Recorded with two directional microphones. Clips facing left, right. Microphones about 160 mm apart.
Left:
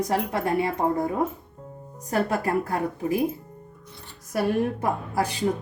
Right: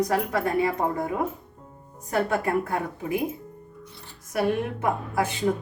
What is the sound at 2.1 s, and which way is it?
Speech, 35° left (ahead or behind).